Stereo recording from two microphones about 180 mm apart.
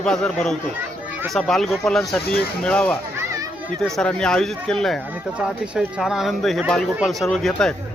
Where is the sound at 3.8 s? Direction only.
5° left (ahead or behind).